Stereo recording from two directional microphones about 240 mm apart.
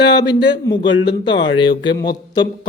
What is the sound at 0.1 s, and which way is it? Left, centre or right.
Speech, centre.